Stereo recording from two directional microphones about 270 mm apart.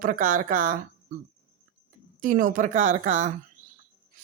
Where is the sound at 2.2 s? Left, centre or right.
Right.